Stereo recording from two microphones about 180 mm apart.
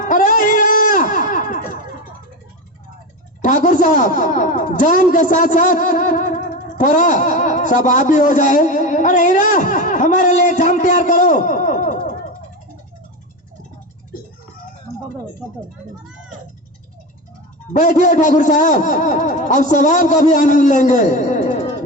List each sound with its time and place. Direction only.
0.0 s a sound: 45° left (ahead or behind)
3.4 s a man's voice: 45° left (ahead or behind)
17.7 s a man's voice: 45° left (ahead or behind)